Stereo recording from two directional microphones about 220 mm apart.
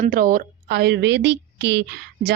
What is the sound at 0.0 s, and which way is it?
A woman's voice, 40° right (ahead or behind).